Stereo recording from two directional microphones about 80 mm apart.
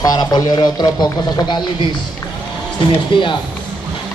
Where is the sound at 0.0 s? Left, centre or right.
Left.